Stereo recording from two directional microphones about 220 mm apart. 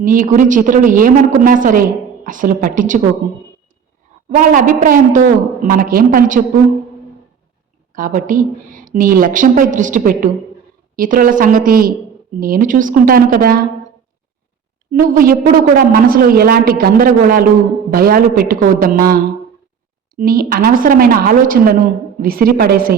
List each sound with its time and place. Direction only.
0.0 s a woman's voice: 40° right (ahead or behind)
4.3 s a woman's voice: 40° right (ahead or behind)
7.9 s a woman's voice: 40° right (ahead or behind)
15.1 s a woman's voice: 40° right (ahead or behind)